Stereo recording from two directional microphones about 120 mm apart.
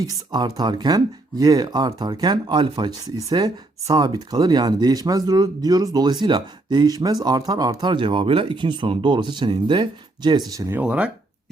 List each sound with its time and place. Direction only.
0.0 s speech: 35° right (ahead or behind)
10.6 s speech: 20° right (ahead or behind)
10.8 s speech: 10° right (ahead or behind)